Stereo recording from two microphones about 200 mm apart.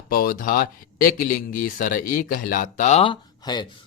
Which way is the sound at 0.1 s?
45° left (ahead or behind).